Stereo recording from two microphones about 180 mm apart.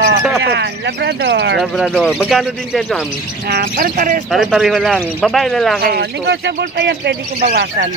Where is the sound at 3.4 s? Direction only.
60° right (ahead or behind).